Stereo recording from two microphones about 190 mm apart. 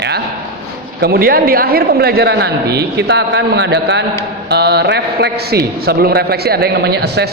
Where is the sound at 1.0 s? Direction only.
55° right (ahead or behind).